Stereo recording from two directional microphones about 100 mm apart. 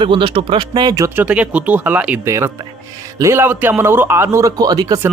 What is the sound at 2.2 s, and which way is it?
A man's voice, 30° right (ahead or behind).